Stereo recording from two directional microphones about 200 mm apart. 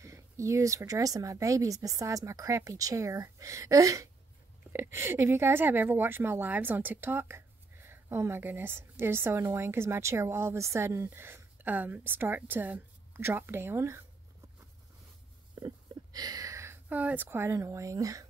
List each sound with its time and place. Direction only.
0.0 s speech: 15° right (ahead or behind)
15.5 s speech: 20° right (ahead or behind)